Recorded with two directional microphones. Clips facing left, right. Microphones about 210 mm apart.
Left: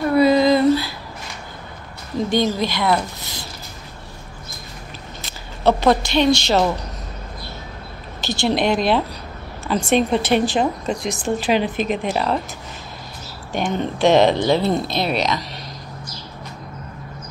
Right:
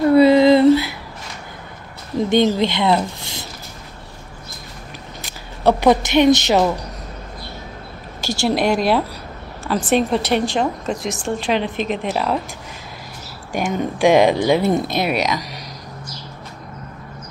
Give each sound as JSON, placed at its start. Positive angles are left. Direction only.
{"t": 0.1, "sound": "female singing", "side_deg": -30}
{"t": 2.1, "sound": "speech", "side_deg": -20}
{"t": 5.2, "sound": "a woman's voice", "side_deg": -15}
{"t": 8.2, "sound": "a woman's voice", "side_deg": -10}
{"t": 13.5, "sound": "speech", "side_deg": -5}